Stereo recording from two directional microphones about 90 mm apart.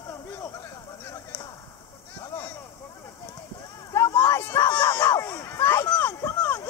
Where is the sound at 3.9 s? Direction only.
30° left (ahead or behind).